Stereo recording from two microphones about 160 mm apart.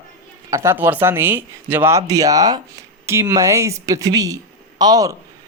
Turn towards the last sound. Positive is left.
turn(degrees=-25)  # may be behind; listen again after turning